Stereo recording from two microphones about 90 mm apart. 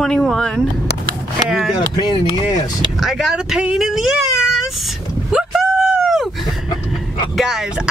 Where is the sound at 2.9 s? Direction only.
Centre (ahead or behind).